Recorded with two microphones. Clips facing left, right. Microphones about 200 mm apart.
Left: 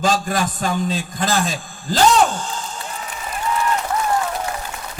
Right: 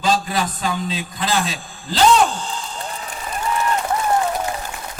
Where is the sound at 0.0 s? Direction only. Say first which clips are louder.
Left 1 dB; 50° left (ahead or behind).